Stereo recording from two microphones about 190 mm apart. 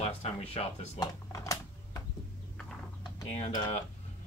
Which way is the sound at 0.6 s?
30° left (ahead or behind).